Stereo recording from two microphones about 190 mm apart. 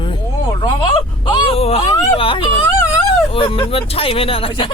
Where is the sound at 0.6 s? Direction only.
25° left (ahead or behind).